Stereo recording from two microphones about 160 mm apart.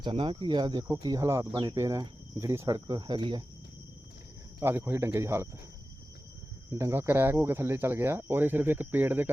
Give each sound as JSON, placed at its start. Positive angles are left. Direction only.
{"t": 0.0, "sound": "speech", "side_deg": -30}
{"t": 4.6, "sound": "speech", "side_deg": -15}
{"t": 6.7, "sound": "speech", "side_deg": -20}